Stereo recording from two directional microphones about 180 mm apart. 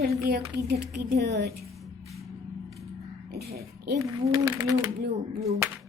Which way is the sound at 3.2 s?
60° right (ahead or behind).